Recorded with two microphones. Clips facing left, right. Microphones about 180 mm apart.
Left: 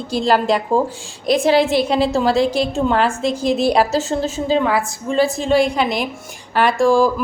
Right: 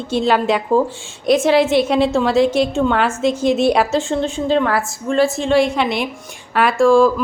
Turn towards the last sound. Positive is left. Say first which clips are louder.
# right 2 dB
turn(degrees=0)  # may be behind; listen again after turning